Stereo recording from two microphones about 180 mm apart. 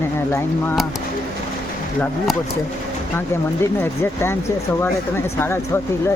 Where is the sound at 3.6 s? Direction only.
15° left (ahead or behind).